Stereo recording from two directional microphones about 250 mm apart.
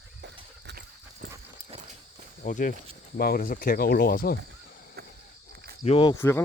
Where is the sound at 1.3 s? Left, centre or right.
Right.